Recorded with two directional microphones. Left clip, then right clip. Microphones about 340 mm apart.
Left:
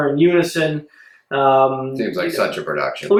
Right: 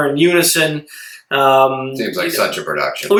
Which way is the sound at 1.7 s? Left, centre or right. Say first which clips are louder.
Right 2 dB; centre.